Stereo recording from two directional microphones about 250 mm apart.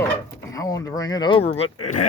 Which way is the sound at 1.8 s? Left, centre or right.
Left.